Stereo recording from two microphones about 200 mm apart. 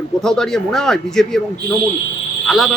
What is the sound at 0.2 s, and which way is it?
A man's voice, 5° left (ahead or behind).